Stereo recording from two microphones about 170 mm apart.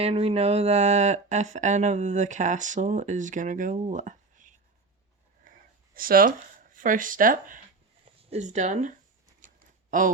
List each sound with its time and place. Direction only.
0.0 s speech: 35° right (ahead or behind)
5.5 s a sound: 60° right (ahead or behind)
6.7 s speech: 50° right (ahead or behind)
8.2 s speech: 40° right (ahead or behind)